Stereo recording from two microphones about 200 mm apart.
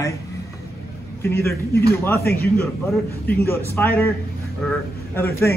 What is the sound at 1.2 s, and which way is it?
Speech, 10° left (ahead or behind).